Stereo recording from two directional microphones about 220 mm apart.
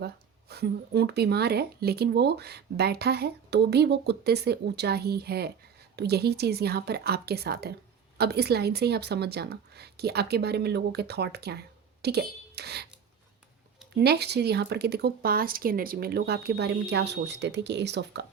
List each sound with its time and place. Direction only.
0.0 s speech: 45° right (ahead or behind)
13.9 s speech: 45° right (ahead or behind)